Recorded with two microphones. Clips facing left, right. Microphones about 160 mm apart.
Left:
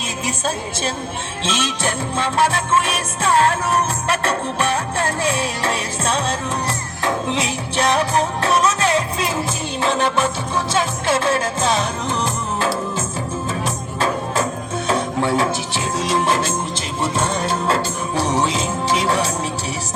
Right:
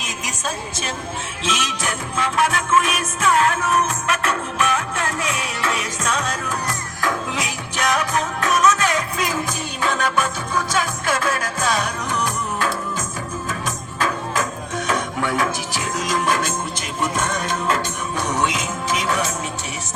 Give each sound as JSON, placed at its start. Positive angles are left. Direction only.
{"t": 1.5, "sound": "music", "side_deg": 30}